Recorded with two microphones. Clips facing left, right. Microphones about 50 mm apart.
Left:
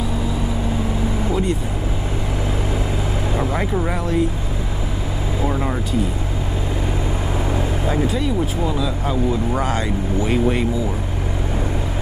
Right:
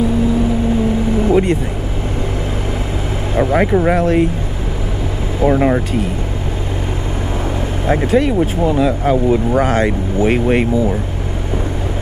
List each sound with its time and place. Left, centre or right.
1.3 s speech: right
3.3 s speech: right
5.4 s speech: right
7.8 s speech: right